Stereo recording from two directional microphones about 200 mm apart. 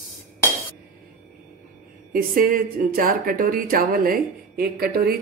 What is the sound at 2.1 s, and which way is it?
Speech, 45° right (ahead or behind).